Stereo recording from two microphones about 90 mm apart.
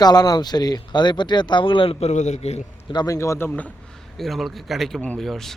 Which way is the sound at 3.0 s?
35° left (ahead or behind).